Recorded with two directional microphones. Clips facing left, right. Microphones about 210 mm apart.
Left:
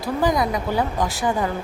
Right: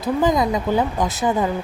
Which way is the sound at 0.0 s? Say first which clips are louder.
Right 2 dB; 20° right (ahead or behind).